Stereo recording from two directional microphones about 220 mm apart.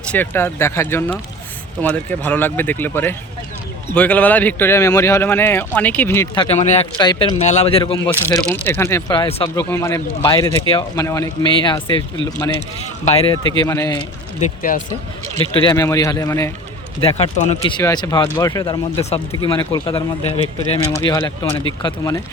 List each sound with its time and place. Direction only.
0.1 s speech: 10° left (ahead or behind)
6.3 s speech: 25° left (ahead or behind)
7.0 s speech: 20° left (ahead or behind)
8.4 s speech: 10° left (ahead or behind)
13.1 s speech: 25° left (ahead or behind)
13.6 s speech: 15° left (ahead or behind)
14.3 s speech: 35° left (ahead or behind)
15.4 s speech: 25° left (ahead or behind)
17.0 s speech: 25° left (ahead or behind)
17.7 s speech: 20° left (ahead or behind)